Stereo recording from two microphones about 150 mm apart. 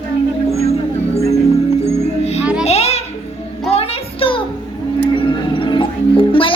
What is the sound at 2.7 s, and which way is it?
Music, 45° left (ahead or behind).